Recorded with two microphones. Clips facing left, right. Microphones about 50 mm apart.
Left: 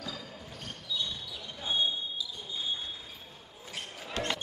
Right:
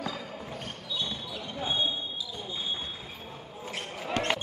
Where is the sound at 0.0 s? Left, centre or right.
Right.